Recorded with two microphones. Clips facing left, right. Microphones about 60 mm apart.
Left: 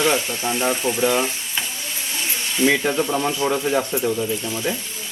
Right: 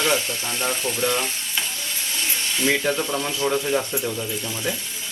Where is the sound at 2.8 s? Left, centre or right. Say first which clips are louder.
Left 3 dB; centre.